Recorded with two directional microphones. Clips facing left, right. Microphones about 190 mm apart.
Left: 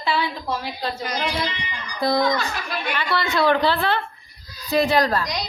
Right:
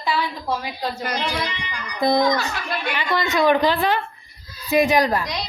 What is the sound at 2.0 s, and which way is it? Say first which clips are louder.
A woman's voice: right 2 dB; 20° right (ahead or behind).